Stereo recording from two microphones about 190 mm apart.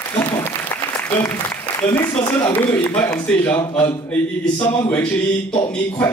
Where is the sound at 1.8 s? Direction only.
10° left (ahead or behind).